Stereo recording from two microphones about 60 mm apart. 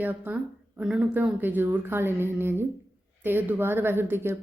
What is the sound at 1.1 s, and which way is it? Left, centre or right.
Speech, right.